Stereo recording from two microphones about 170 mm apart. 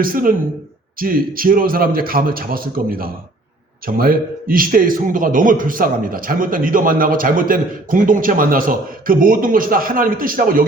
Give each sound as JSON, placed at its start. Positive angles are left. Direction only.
{"t": 0.0, "sound": "a man's voice", "side_deg": -55}